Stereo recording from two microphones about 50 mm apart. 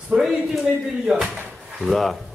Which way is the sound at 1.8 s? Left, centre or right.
Centre.